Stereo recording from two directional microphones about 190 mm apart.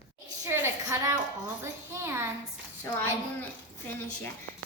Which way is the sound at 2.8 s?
10° left (ahead or behind).